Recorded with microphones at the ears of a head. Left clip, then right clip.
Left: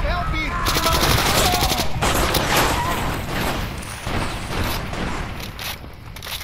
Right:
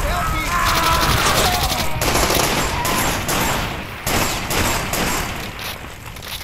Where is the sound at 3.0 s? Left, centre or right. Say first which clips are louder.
Right 5 dB; right.